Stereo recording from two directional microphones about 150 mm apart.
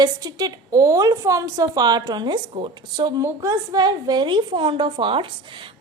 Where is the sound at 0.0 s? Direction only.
25° right (ahead or behind).